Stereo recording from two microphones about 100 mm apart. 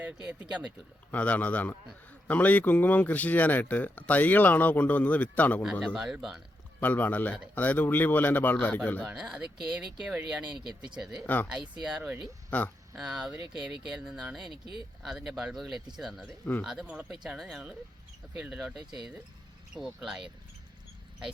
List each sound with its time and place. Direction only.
0.0 s speech: 15° right (ahead or behind)
1.1 s speech: 15° left (ahead or behind)
5.8 s speech: centre (ahead or behind)
6.8 s speech: 15° left (ahead or behind)
9.0 s speech: 5° right (ahead or behind)
12.5 s speech: 15° left (ahead or behind)
13.0 s speech: 5° right (ahead or behind)